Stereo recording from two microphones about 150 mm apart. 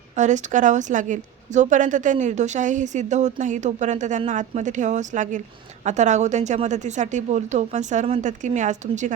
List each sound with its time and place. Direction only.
0.2 s a woman's voice: 55° right (ahead or behind)